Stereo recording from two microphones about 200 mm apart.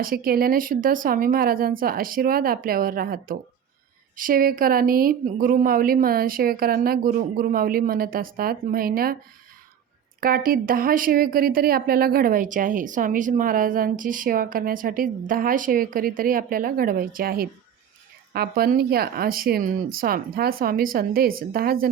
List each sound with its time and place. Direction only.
0.0 s a woman's voice: 45° right (ahead or behind)
10.2 s a woman's voice: 45° right (ahead or behind)